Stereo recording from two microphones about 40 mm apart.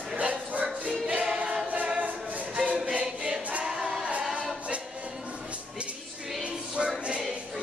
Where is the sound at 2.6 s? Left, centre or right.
Right.